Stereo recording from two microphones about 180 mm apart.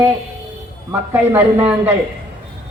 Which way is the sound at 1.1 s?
10° right (ahead or behind).